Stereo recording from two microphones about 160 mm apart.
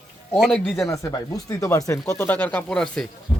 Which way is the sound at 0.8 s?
20° left (ahead or behind).